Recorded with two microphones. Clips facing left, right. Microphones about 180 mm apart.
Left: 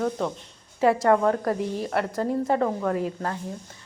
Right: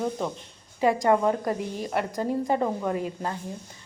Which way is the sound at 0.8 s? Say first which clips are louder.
Left 2 dB; centre (ahead or behind).